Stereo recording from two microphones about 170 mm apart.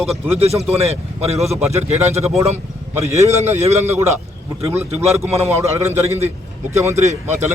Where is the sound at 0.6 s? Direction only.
35° right (ahead or behind).